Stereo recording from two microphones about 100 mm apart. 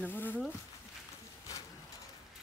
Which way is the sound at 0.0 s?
20° left (ahead or behind).